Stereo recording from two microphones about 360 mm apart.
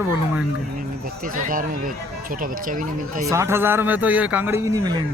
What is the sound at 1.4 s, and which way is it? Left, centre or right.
Speech, right.